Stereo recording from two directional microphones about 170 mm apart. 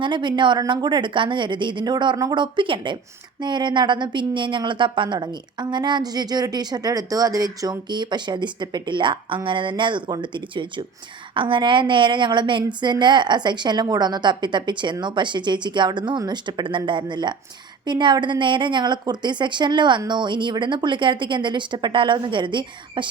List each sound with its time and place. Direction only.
0.0 s a woman's voice: 25° right (ahead or behind)